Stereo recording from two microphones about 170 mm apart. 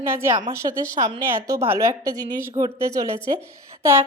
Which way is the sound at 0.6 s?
35° right (ahead or behind).